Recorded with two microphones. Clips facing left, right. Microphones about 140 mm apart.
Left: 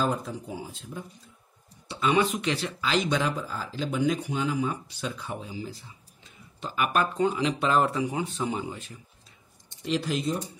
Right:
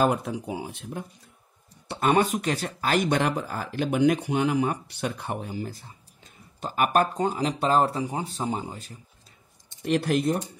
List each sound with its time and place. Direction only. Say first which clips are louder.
0.0 s speech: right 5 dB; 65° right (ahead or behind)
1.9 s speech: right 2 dB; 50° right (ahead or behind)
9.8 s speech: right 4 dB; 55° right (ahead or behind)